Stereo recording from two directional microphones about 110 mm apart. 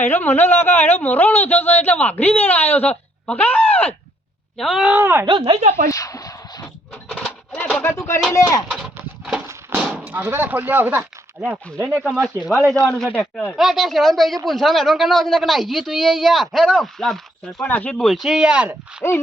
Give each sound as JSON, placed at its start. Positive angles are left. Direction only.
{"t": 0.0, "sound": "speech", "side_deg": 20}
{"t": 4.5, "sound": "speech", "side_deg": -5}
{"t": 4.9, "sound": "speech", "side_deg": -20}
{"t": 5.2, "sound": "speech", "side_deg": -45}
{"t": 5.9, "sound": "a sound", "side_deg": 30}
{"t": 7.5, "sound": "a sound", "side_deg": 15}
{"t": 8.3, "sound": "speech", "side_deg": 30}
{"t": 8.6, "sound": "a sound", "side_deg": -5}
{"t": 9.5, "sound": "a sound", "side_deg": -20}
{"t": 10.1, "sound": "speech", "side_deg": -20}
{"t": 12.5, "sound": "speech", "side_deg": 0}
{"t": 13.1, "sound": "speech", "side_deg": 15}
{"t": 13.6, "sound": "speech", "side_deg": 0}
{"t": 17.6, "sound": "speech", "side_deg": 15}